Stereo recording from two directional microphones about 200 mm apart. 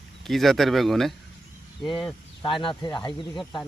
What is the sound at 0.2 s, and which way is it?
Speech, centre (ahead or behind).